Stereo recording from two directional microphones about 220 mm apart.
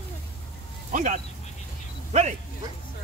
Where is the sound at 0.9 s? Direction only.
35° right (ahead or behind).